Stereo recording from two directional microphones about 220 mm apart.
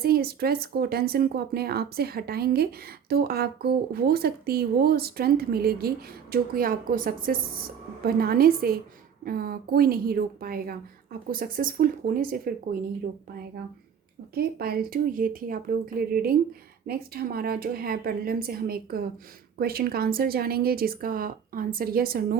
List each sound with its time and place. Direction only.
0.0 s a woman's voice: 45° right (ahead or behind)
14.3 s speech: 45° right (ahead or behind)